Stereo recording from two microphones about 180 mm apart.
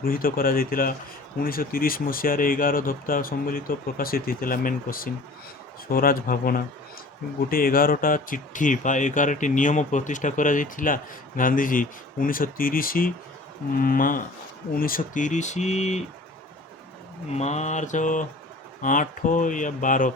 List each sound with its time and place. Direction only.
0.0 s speech: 55° left (ahead or behind); by 16.0 s 40° left (ahead or behind)
17.3 s speech: 40° left (ahead or behind)